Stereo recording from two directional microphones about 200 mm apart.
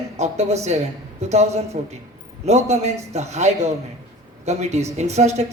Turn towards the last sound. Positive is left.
turn(degrees=-35)  # may be behind; listen again after turning